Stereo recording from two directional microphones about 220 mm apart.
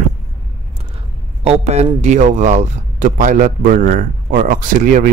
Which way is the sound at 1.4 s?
30° right (ahead or behind).